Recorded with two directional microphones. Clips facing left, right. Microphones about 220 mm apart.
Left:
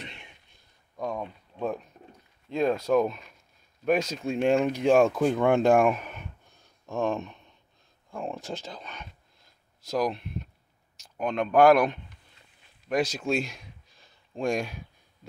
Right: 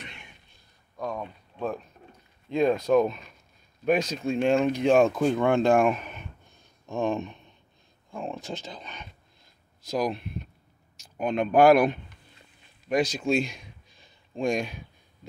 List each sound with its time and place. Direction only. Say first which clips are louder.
0.0 s a sound: left 2 dB; 30° left (ahead or behind)
0.9 s speech: left 1 dB; 5° left (ahead or behind)
2.5 s speech: right 2 dB; 5° left (ahead or behind)